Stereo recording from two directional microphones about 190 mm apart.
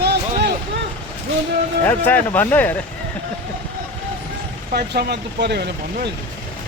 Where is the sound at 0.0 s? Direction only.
60° right (ahead or behind).